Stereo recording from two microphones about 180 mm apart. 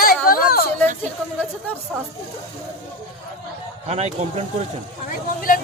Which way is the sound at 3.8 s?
35° right (ahead or behind).